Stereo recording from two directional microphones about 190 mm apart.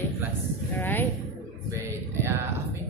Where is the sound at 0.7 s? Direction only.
10° left (ahead or behind).